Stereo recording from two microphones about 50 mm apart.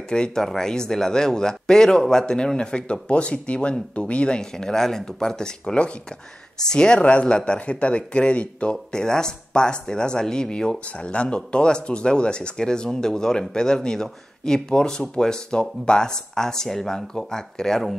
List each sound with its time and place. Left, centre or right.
0.1 s speech: centre